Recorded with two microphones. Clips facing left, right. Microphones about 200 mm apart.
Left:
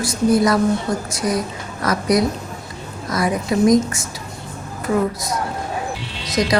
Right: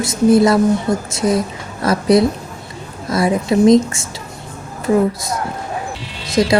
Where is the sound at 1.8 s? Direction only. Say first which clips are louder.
Right 5 dB; 30° right (ahead or behind).